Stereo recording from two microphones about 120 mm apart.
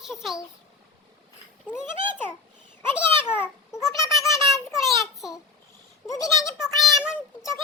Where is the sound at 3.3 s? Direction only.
20° left (ahead or behind).